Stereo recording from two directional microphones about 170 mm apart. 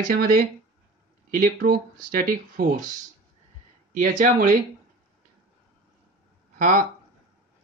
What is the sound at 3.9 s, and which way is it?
Speech, 50° right (ahead or behind).